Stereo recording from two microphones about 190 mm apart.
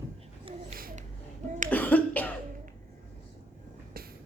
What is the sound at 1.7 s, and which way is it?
Cough, 10° left (ahead or behind).